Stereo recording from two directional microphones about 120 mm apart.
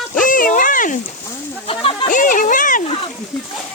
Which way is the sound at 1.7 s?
50° left (ahead or behind).